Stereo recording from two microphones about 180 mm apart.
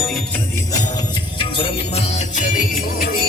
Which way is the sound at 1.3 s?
30° left (ahead or behind).